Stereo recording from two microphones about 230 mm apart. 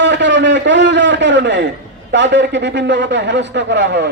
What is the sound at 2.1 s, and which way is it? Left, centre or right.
A man's voice, right.